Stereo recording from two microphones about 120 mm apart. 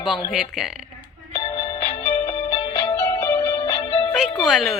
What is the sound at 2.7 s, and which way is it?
Music, 25° left (ahead or behind).